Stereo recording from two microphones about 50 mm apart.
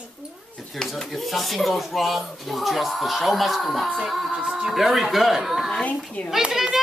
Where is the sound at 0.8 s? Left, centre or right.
Centre.